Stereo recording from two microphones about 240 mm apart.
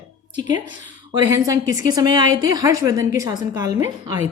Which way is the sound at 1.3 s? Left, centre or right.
Centre.